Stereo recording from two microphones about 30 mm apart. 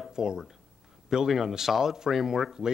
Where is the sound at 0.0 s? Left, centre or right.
Right.